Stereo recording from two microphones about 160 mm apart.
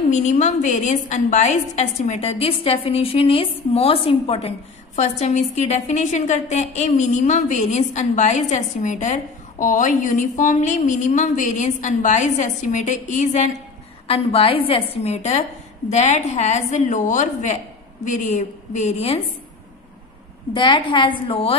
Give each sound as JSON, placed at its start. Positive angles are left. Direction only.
{"t": 0.1, "sound": "a woman's voice", "side_deg": 50}
{"t": 14.0, "sound": "a woman's voice", "side_deg": 35}
{"t": 20.5, "sound": "a woman's voice", "side_deg": 30}